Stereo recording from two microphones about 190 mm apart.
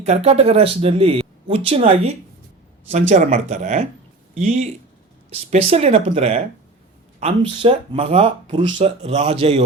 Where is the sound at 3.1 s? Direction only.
40° right (ahead or behind).